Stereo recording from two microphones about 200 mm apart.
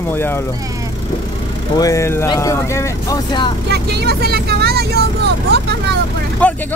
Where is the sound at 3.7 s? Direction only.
55° right (ahead or behind).